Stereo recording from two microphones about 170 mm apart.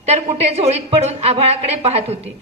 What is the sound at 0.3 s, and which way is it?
A woman's voice, 40° right (ahead or behind).